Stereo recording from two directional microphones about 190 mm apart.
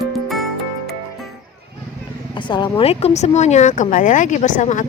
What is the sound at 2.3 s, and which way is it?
Speech, 25° left (ahead or behind).